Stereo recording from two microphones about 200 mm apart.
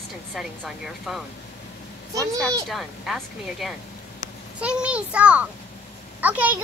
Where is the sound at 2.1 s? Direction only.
15° right (ahead or behind).